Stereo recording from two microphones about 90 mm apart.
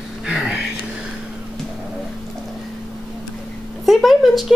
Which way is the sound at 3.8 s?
Centre (ahead or behind).